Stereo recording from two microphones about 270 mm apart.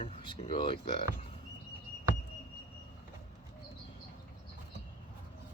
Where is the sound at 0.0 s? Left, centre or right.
Left.